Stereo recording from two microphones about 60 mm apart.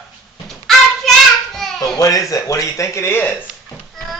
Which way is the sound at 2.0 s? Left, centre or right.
Left.